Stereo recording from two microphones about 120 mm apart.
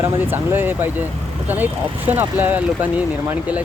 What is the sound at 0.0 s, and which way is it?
Speech, 15° right (ahead or behind).